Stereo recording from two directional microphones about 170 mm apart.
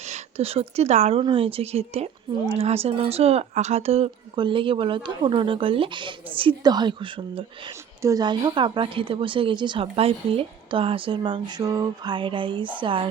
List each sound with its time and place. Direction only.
0.0 s speech: 40° right (ahead or behind)